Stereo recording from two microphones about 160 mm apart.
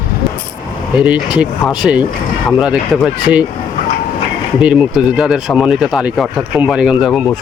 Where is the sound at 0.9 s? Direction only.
5° right (ahead or behind).